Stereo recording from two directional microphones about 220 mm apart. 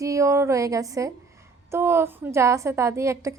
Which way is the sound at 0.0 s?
15° right (ahead or behind).